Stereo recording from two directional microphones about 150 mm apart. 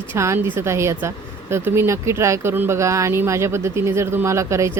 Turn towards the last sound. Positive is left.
turn(degrees=-20)  # may be behind; listen again after turning